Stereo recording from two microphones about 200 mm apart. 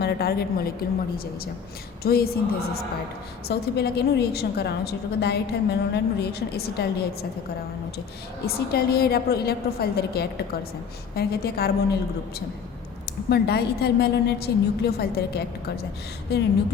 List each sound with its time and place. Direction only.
0.0 s a woman's voice: 50° left (ahead or behind)
2.0 s a woman's voice: 50° left (ahead or behind)
8.4 s a woman's voice: 50° left (ahead or behind)
13.3 s a woman's voice: 55° left (ahead or behind)